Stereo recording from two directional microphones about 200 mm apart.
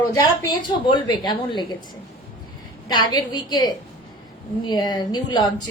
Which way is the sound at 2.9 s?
20° left (ahead or behind).